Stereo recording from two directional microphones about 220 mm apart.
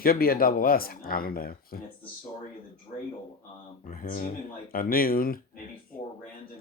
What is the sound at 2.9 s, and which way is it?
Speech, 40° left (ahead or behind).